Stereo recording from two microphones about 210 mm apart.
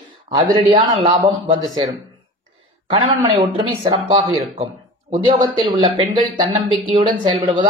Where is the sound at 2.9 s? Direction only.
25° right (ahead or behind).